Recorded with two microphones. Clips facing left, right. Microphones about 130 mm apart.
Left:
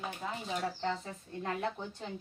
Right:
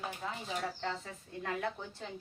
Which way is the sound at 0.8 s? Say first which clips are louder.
Left 3 dB; 25° left (ahead or behind).